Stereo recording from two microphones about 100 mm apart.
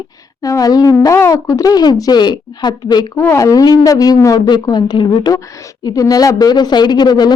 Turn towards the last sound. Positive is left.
turn(degrees=45)  # may be behind; listen again after turning